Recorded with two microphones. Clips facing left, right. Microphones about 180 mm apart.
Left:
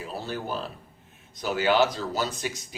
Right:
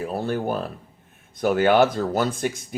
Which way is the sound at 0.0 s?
55° right (ahead or behind).